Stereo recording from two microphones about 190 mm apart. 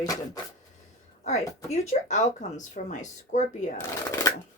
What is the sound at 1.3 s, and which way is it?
Speech, 35° left (ahead or behind).